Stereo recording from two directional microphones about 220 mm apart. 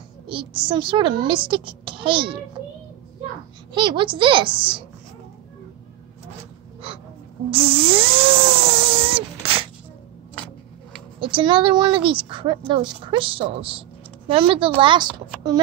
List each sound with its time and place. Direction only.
0.3 s a woman's voice: 25° right (ahead or behind)
3.7 s a woman's voice: 20° right (ahead or behind)
6.8 s speech: 25° right (ahead or behind)
7.5 s a sound: 25° right (ahead or behind)
11.1 s a woman's voice: 25° right (ahead or behind)